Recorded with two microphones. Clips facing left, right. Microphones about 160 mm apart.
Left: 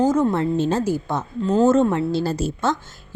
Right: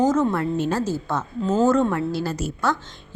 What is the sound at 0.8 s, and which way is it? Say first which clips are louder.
Speech: left 2 dB; 15° left (ahead or behind).